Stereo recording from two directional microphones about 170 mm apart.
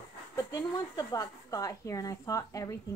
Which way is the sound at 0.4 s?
20° left (ahead or behind).